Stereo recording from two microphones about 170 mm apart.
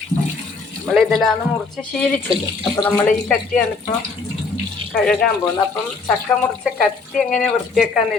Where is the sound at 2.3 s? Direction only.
25° left (ahead or behind).